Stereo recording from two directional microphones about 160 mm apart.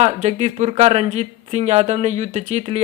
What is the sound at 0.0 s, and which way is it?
Speech, 45° right (ahead or behind).